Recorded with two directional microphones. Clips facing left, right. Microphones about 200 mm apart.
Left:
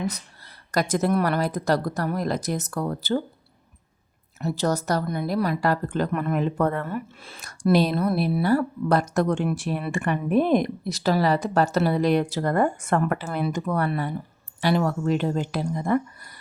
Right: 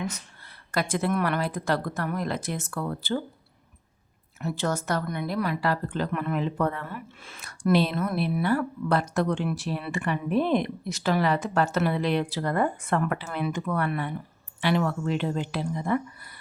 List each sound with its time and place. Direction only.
0.7 s a woman's voice: 40° left (ahead or behind)
4.4 s a woman's voice: 40° left (ahead or behind)